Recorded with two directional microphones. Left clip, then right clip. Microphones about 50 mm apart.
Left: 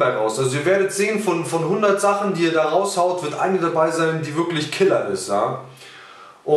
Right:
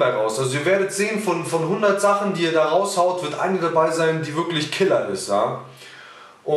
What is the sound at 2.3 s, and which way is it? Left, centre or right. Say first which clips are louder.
Speech: left 1 dB; centre.